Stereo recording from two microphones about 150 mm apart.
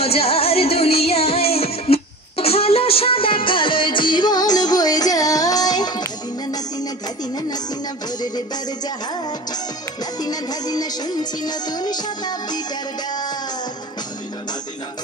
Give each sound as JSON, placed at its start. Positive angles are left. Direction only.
{"t": 0.0, "sound": "music", "side_deg": 40}
{"t": 10.2, "sound": "music", "side_deg": 25}